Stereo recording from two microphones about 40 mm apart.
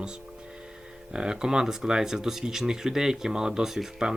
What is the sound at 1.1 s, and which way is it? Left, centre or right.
Speech, centre.